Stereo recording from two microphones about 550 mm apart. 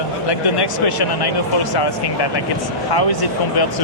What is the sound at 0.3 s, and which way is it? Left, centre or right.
Speech, left.